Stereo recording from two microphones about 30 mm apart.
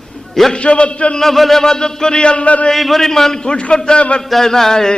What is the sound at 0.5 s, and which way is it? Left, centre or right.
Speech, left.